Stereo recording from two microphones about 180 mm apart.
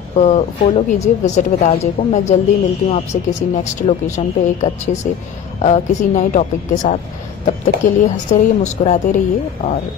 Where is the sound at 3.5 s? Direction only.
40° left (ahead or behind).